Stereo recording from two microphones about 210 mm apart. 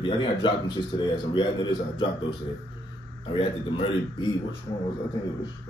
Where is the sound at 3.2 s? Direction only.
25° left (ahead or behind).